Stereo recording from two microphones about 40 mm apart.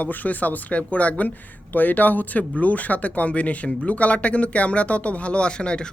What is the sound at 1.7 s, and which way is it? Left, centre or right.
Speech, left.